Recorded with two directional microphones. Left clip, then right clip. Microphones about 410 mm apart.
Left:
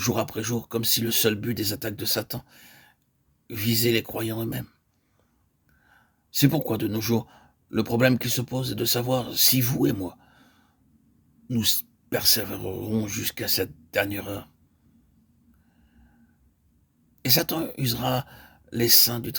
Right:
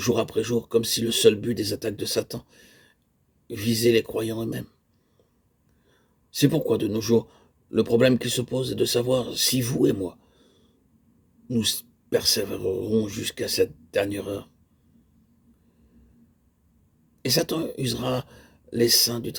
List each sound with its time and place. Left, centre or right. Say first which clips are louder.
0.0 s a man's voice: right 3 dB; centre
6.3 s a man's voice: right 2 dB; left
10.3 s a sound: left 2 dB; left
11.6 s a man's voice: left 4 dB; left
17.2 s a man's voice: right 1 dB; left